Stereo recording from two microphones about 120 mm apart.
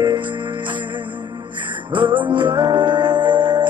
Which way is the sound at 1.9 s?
40° right (ahead or behind).